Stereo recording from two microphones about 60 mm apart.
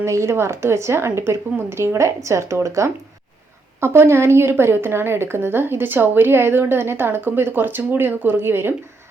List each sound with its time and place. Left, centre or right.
0.0 s a woman's voice: right
3.8 s a woman's voice: right